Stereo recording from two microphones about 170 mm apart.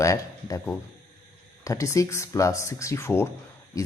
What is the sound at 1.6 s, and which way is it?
Speech, 20° left (ahead or behind).